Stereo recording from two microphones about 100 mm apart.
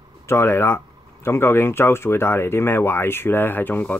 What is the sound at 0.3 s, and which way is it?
Speech, 25° left (ahead or behind).